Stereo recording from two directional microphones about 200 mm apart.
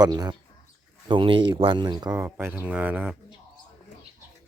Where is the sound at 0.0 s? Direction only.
20° right (ahead or behind).